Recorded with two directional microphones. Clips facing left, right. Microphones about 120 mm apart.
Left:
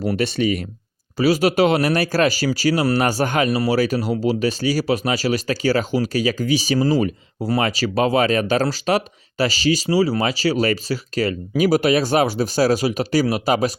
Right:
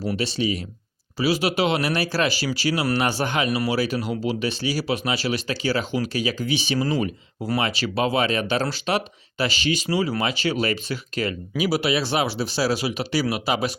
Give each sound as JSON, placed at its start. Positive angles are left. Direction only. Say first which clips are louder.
{"t": 0.1, "sound": "speech", "louder": "left 4 dB", "side_deg": 55}
{"t": 1.2, "sound": "speech", "louder": "left 5 dB", "side_deg": 45}